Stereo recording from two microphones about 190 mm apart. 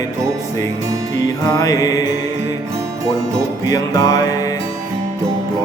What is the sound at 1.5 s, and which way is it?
Music, 20° left (ahead or behind).